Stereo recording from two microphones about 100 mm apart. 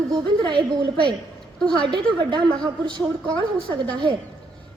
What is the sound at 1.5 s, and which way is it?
Speech, 10° left (ahead or behind).